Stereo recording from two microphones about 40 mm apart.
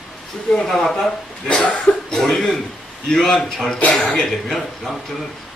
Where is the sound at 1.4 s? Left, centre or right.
Left.